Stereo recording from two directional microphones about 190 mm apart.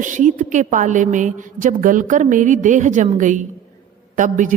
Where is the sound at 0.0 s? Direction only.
40° right (ahead or behind).